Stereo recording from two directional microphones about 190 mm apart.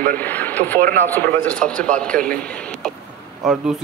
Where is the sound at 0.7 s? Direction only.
45° right (ahead or behind).